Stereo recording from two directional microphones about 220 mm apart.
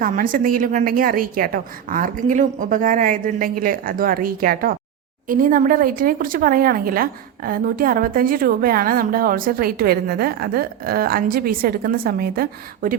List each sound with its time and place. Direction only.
0.0 s speech: 40° right (ahead or behind)